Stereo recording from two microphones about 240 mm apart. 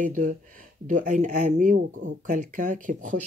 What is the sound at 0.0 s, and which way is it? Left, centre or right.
Speech, right.